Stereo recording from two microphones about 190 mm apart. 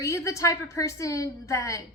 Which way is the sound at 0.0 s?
15° left (ahead or behind).